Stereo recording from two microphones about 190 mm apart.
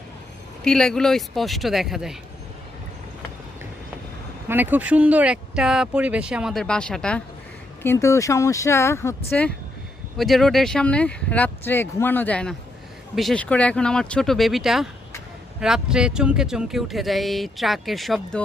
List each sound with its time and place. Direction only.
0.6 s speech: 5° left (ahead or behind)
4.4 s speech: 10° right (ahead or behind)